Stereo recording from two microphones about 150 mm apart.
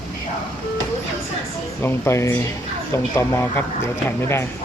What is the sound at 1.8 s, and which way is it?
Speech, 15° left (ahead or behind).